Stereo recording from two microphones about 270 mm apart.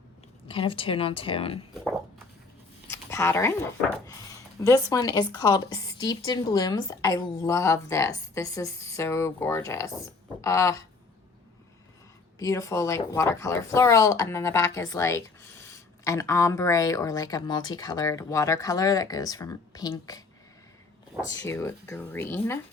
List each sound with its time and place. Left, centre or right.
0.4 s speech: centre
2.9 s a woman's voice: centre
12.4 s a woman's voice: centre
21.2 s a woman's voice: centre